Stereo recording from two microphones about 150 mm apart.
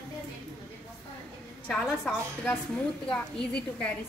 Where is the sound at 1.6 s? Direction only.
5° left (ahead or behind).